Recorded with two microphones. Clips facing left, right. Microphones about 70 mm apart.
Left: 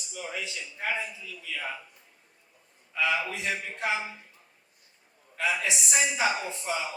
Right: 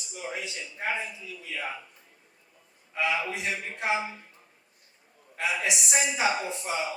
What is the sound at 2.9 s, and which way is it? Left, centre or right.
A man's voice, right.